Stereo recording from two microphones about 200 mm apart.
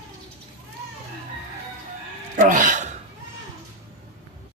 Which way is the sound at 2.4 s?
40° right (ahead or behind).